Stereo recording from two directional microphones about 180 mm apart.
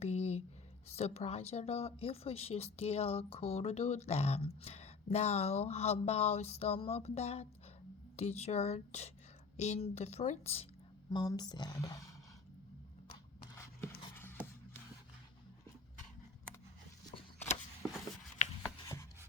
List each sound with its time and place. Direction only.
0.0 s a sound: 35° left (ahead or behind)
0.9 s speech: 35° left (ahead or behind)
11.1 s speech: 20° left (ahead or behind)
14.2 s music: 10° left (ahead or behind)